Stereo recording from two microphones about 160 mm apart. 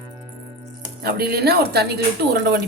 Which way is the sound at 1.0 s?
80° right.